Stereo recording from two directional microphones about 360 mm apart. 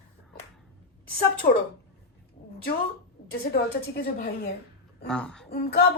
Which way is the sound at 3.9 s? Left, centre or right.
Left.